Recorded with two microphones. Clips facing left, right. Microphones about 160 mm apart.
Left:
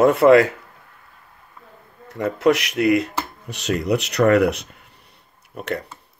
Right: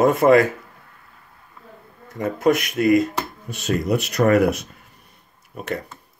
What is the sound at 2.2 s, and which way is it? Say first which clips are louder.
Speech: left 1 dB; 65° left (ahead or behind).